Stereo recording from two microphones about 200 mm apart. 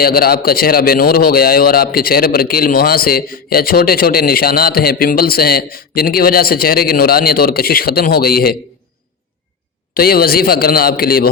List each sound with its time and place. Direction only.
0.0 s a man's voice: 50° left (ahead or behind)
9.9 s a man's voice: 50° left (ahead or behind)